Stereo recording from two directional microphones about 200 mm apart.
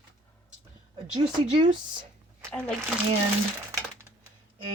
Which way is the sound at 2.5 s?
5° left (ahead or behind).